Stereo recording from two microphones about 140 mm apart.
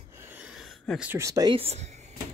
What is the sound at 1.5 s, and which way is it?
Speech, 45° right (ahead or behind).